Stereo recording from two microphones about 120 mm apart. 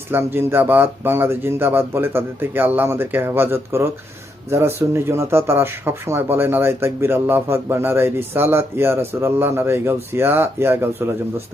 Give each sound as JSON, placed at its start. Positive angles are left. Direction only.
{"t": 0.1, "sound": "a man's voice", "side_deg": -20}